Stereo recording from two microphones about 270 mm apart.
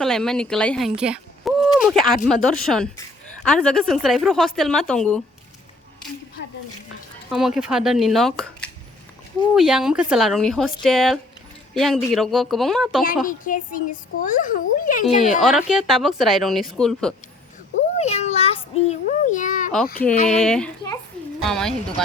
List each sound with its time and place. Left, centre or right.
0.0 s speech: centre
7.3 s speech: centre
13.2 s a child's voice: left
15.4 s speech: centre
17.9 s a child's voice: left
20.2 s speech: centre